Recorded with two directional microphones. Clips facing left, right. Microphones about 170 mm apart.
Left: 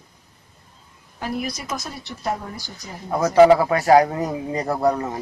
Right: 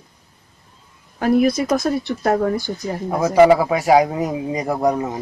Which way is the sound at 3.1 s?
10° right (ahead or behind).